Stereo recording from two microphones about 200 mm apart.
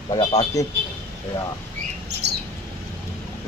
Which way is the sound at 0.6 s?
15° left (ahead or behind).